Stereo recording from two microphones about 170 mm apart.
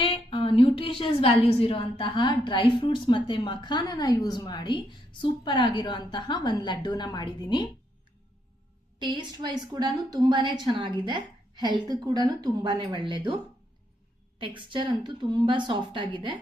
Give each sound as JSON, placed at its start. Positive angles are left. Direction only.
{"t": 0.0, "sound": "a woman's voice", "side_deg": 30}
{"t": 9.0, "sound": "a woman's voice", "side_deg": -25}
{"t": 14.3, "sound": "a woman's voice", "side_deg": -30}